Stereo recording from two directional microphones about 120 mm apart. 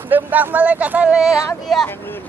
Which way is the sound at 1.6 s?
5° left (ahead or behind).